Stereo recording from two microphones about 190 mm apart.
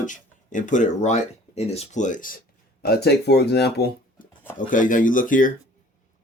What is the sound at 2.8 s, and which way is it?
Speech, 55° left (ahead or behind).